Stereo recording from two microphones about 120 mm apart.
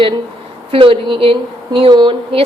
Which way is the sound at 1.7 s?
40° right (ahead or behind).